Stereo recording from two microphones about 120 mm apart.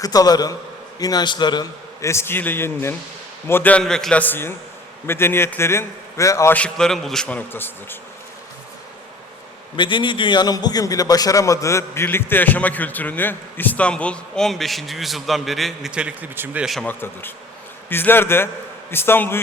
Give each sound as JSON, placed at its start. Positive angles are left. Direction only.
{"t": 0.0, "sound": "a man's voice", "side_deg": 30}
{"t": 2.0, "sound": "a man's voice", "side_deg": 25}
{"t": 6.5, "sound": "a man's voice", "side_deg": 10}
{"t": 9.7, "sound": "a man's voice", "side_deg": 40}
{"t": 16.8, "sound": "a man's voice", "side_deg": 15}